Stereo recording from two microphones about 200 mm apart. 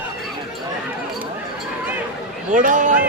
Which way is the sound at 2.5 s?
40° right (ahead or behind).